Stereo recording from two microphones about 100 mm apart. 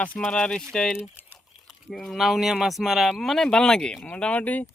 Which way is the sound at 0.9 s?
15° right (ahead or behind).